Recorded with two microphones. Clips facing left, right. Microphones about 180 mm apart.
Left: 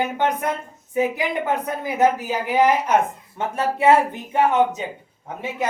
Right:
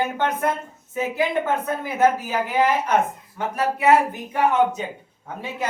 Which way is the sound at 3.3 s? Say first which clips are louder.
Left 1 dB; 25° left (ahead or behind).